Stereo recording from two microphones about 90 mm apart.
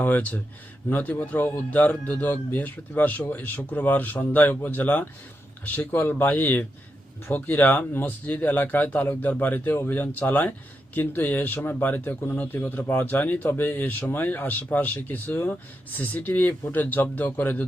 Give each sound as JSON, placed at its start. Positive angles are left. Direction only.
{"t": 0.0, "sound": "speech", "side_deg": 20}